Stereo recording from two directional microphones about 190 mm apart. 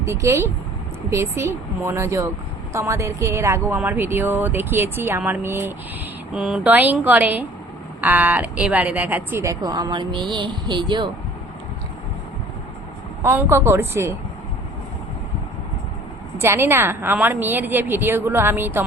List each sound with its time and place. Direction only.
0.0 s speech: 15° right (ahead or behind)
13.2 s speech: 15° right (ahead or behind)
16.4 s speech: 10° right (ahead or behind)